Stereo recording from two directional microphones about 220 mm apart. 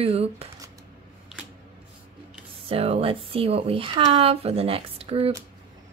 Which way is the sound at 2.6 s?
25° right (ahead or behind).